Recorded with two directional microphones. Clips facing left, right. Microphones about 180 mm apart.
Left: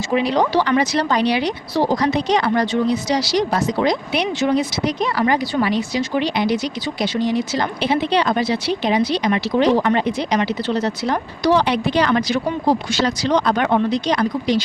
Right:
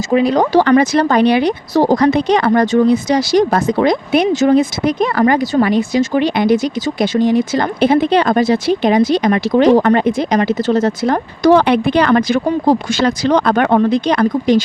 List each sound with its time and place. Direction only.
0.1 s speech: 45° right (ahead or behind)